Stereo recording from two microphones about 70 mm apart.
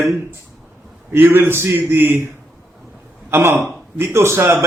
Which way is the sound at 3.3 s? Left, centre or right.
Right.